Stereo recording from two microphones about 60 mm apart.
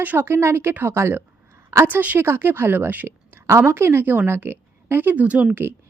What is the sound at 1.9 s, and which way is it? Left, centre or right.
Speech, right.